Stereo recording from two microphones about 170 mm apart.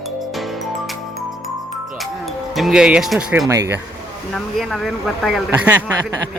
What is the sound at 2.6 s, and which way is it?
Speech, 5° right (ahead or behind).